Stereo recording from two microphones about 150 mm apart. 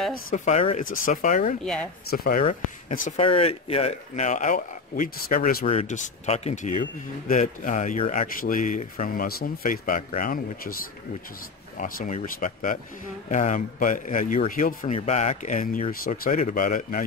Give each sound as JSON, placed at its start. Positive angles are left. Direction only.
{"t": 0.3, "sound": "speech", "side_deg": 50}
{"t": 1.0, "sound": "speech", "side_deg": 60}
{"t": 1.6, "sound": "speech", "side_deg": 5}
{"t": 2.0, "sound": "speech", "side_deg": 85}
{"t": 2.9, "sound": "speech", "side_deg": 65}
{"t": 3.2, "sound": "speech", "side_deg": 40}
{"t": 5.7, "sound": "speech", "side_deg": 50}
{"t": 15.0, "sound": "speech", "side_deg": 50}